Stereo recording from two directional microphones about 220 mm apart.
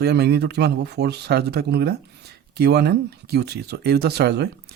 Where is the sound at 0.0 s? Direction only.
50° right (ahead or behind).